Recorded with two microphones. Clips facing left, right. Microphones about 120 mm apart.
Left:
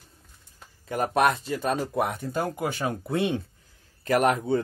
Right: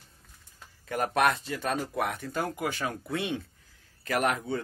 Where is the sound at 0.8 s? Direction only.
25° left (ahead or behind).